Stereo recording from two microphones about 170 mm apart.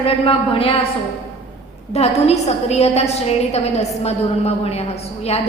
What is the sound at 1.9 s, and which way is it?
A woman's voice, 40° left (ahead or behind).